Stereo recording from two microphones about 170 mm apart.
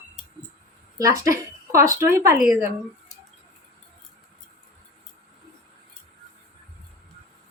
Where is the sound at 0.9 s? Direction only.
20° right (ahead or behind).